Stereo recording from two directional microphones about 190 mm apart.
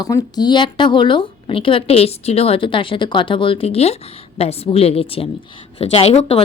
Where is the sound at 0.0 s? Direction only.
20° left (ahead or behind).